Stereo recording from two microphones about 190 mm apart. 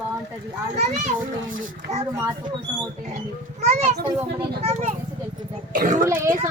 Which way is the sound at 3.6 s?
35° right (ahead or behind).